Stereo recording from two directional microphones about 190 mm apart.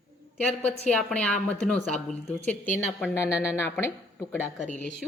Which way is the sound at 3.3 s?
5° right (ahead or behind).